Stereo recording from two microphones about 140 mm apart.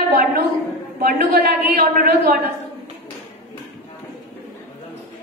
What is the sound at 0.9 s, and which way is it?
A man's voice, 90° right.